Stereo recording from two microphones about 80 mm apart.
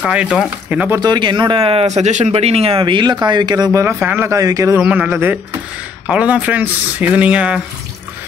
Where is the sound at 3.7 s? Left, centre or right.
Right.